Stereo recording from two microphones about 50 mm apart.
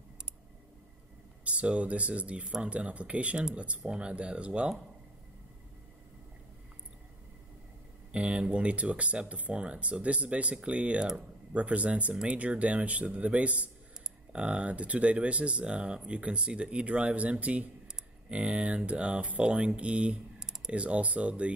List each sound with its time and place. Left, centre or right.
1.4 s speech: right
8.1 s speech: right